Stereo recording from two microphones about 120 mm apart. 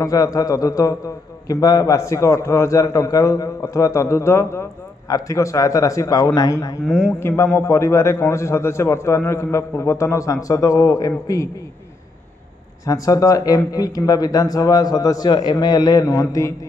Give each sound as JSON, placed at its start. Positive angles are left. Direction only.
{"t": 0.0, "sound": "a man's voice", "side_deg": 30}
{"t": 12.8, "sound": "speech", "side_deg": 30}